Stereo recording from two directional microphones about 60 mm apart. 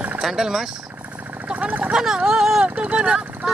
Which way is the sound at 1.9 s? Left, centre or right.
Centre.